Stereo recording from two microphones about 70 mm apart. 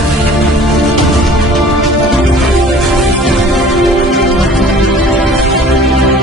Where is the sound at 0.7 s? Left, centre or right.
Centre.